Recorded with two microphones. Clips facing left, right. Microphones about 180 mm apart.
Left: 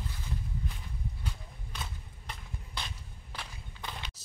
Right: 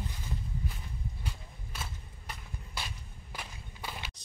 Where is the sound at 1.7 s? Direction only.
5° right (ahead or behind).